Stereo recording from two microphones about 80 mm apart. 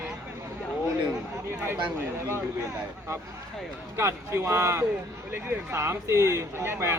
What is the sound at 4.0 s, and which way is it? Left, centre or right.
Speech, right.